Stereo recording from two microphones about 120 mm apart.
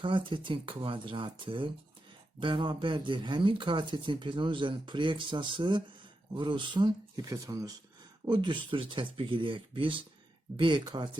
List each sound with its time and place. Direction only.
0.0 s a man's voice: 45° right (ahead or behind); by 7.8 s 30° right (ahead or behind)
8.2 s a man's voice: 40° right (ahead or behind)